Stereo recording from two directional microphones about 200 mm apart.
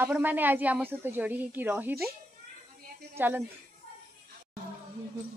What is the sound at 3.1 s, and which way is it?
Speech, 10° right (ahead or behind).